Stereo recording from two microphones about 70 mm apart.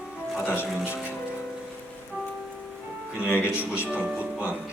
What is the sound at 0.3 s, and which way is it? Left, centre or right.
Speech, left.